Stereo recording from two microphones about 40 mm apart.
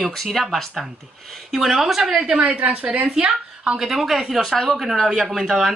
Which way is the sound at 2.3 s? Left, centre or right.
Right.